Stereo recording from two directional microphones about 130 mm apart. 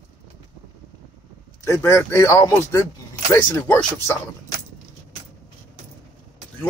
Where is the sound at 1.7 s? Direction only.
20° left (ahead or behind).